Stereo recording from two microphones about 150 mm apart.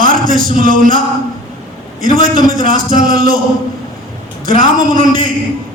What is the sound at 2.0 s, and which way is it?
Music, 70° right (ahead or behind).